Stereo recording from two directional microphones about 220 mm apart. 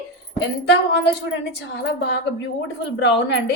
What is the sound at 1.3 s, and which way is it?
A woman's voice, 50° left (ahead or behind).